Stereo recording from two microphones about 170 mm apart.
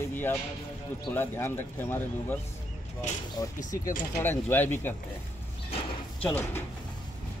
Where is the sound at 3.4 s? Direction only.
20° left (ahead or behind).